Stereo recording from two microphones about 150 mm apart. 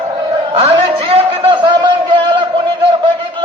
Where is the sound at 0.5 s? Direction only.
40° right (ahead or behind).